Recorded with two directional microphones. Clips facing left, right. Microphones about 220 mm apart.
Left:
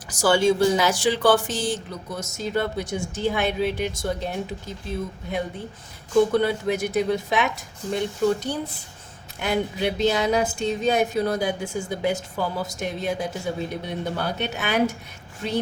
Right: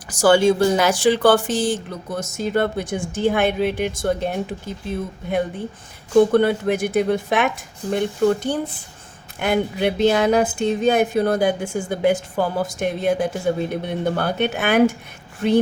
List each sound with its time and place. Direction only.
0.1 s a woman's voice: 55° right (ahead or behind)